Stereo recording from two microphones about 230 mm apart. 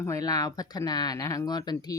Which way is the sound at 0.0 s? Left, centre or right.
Centre.